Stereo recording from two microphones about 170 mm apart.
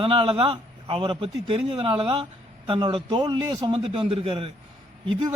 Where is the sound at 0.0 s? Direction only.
30° right (ahead or behind).